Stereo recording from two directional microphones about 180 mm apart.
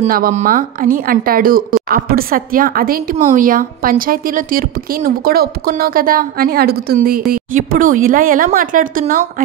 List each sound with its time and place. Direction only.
0.1 s a woman's voice: 45° right (ahead or behind)